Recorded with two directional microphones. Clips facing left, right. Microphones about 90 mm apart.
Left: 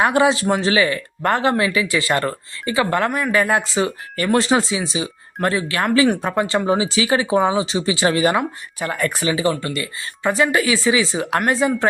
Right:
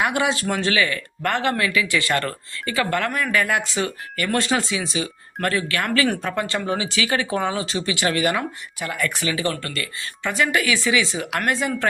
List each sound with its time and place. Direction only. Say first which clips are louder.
0.0 s speech: left 6 dB; 30° left (ahead or behind)
9.5 s speech: left 5 dB; 15° left (ahead or behind)
10.2 s speech: left 4 dB; 30° left (ahead or behind)